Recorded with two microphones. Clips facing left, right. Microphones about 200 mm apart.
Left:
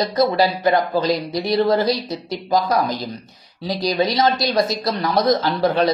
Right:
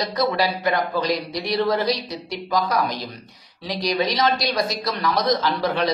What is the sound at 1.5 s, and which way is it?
Speech, 30° left (ahead or behind).